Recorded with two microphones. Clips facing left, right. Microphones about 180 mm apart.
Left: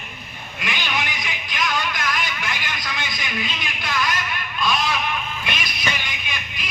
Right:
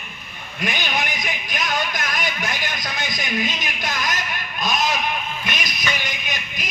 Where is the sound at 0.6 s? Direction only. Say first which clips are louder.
Right 2 dB; 45° right (ahead or behind).